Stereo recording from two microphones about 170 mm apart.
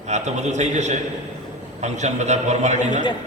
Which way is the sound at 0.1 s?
45° right (ahead or behind).